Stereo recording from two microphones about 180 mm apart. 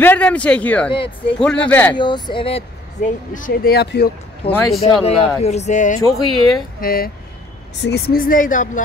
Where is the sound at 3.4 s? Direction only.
50° left (ahead or behind).